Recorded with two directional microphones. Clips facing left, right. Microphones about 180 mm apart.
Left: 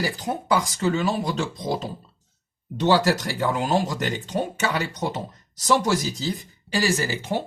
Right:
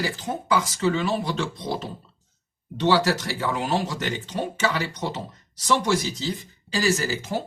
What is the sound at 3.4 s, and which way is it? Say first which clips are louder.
Speech: left 3 dB; 45° left (ahead or behind).